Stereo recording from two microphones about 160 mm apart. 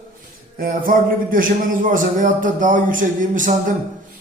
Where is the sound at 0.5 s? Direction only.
60° right (ahead or behind).